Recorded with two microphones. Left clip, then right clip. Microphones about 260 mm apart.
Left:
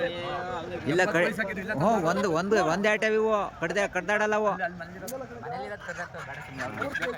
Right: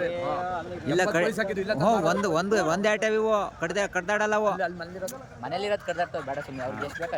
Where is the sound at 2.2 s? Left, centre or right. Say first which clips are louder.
Even; centre.